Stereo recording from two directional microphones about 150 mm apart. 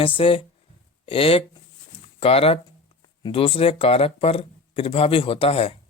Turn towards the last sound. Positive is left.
turn(degrees=40)  # may be behind; listen again after turning